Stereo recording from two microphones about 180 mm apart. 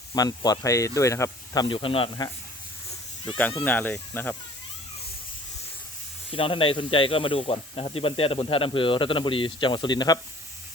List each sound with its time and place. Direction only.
0.1 s speech: 20° left (ahead or behind)
3.6 s speech: 10° left (ahead or behind)
6.3 s speech: 30° left (ahead or behind)